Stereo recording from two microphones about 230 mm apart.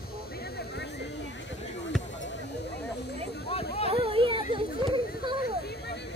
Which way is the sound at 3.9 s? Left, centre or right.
Right.